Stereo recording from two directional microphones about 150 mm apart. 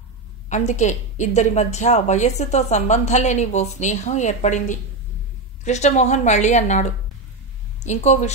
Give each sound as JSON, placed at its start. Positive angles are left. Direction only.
{"t": 0.5, "sound": "speech", "side_deg": 50}